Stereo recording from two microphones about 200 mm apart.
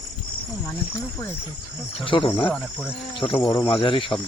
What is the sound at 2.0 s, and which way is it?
Speech, 25° left (ahead or behind).